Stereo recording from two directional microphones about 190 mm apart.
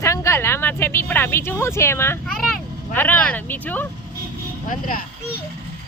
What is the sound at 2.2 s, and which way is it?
A woman's voice, centre (ahead or behind).